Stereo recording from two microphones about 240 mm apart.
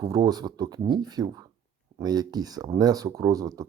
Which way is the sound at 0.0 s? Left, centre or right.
Centre.